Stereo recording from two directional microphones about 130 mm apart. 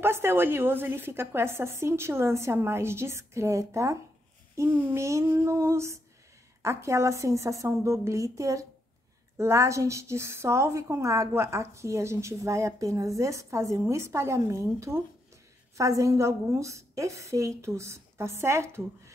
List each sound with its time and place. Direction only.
0.0 s a woman's voice: 20° right (ahead or behind)